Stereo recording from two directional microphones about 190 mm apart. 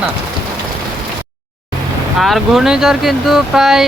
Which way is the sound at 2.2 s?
Centre (ahead or behind).